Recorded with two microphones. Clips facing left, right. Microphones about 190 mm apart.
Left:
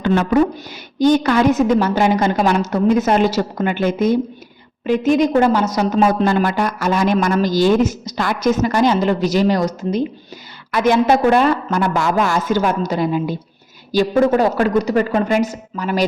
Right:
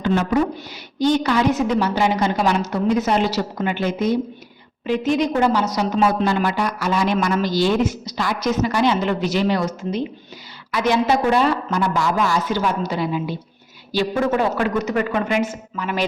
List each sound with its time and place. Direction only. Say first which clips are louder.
0.0 s a woman's voice: left 3 dB; 65° left (ahead or behind)
0.9 s a woman's voice: left 4 dB; 50° left (ahead or behind)
10.7 s a woman's voice: left 4 dB; 50° left (ahead or behind)